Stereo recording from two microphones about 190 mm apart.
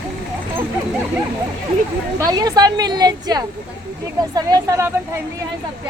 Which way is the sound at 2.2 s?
20° right (ahead or behind).